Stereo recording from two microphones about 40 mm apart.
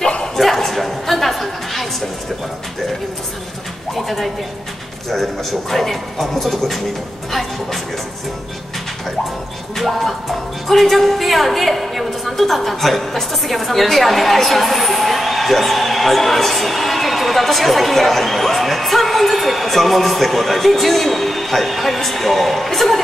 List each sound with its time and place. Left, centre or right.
0.0 s bow-wow: centre
0.4 s a woman's voice: centre
3.9 s a woman's voice: centre
9.8 s a woman's voice: centre